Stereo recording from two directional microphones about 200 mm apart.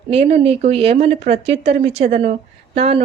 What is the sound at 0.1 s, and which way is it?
A woman's voice, 30° right (ahead or behind).